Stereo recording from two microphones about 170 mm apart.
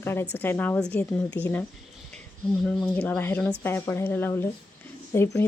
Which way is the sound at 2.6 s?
5° left (ahead or behind).